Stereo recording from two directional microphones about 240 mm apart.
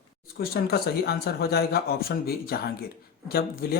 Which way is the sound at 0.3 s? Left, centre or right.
Left.